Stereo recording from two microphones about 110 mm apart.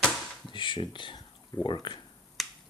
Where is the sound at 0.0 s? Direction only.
Centre (ahead or behind).